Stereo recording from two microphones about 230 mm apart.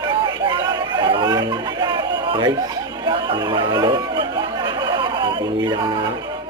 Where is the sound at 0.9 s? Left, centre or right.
Centre.